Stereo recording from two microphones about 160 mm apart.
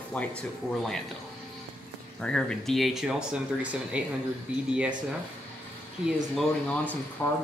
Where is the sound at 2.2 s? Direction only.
5° left (ahead or behind).